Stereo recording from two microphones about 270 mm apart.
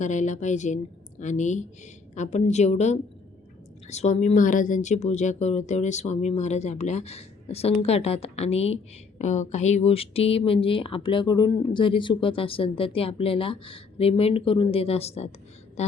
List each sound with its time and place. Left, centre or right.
0.0 s speech: left